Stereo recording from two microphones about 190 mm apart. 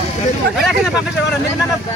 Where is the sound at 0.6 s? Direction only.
Centre (ahead or behind).